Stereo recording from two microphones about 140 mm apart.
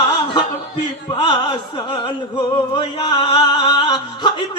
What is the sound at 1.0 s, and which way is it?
Music, 35° left (ahead or behind).